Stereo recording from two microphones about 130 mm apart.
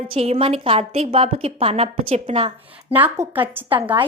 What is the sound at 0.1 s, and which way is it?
A woman's voice, 50° right (ahead or behind).